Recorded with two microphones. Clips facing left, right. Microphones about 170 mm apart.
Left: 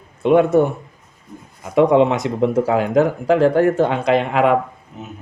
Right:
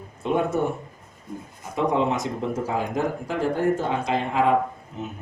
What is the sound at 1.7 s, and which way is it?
Speech, 70° left (ahead or behind).